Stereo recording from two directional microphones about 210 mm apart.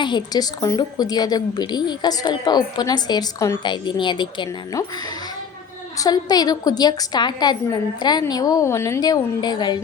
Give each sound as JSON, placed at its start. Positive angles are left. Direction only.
{"t": 0.0, "sound": "a woman's voice", "side_deg": 20}
{"t": 6.0, "sound": "a woman's voice", "side_deg": 20}